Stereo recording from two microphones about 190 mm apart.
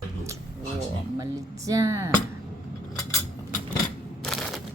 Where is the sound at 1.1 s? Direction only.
15° right (ahead or behind).